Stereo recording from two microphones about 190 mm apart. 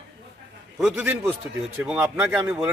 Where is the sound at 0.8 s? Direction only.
10° right (ahead or behind).